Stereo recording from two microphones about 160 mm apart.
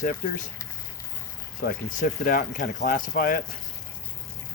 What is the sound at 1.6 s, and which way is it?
Speech, 60° left (ahead or behind).